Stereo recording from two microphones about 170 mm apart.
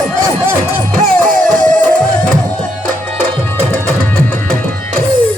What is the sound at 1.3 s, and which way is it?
Music, 50° right (ahead or behind).